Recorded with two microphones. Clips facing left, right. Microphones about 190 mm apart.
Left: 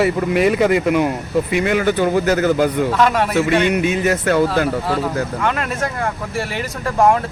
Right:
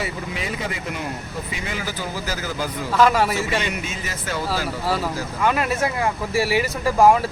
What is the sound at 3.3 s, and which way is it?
Speech, 60° left (ahead or behind).